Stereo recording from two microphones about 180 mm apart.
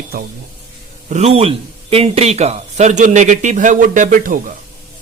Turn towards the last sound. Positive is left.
turn(degrees=-45)  # may be behind; listen again after turning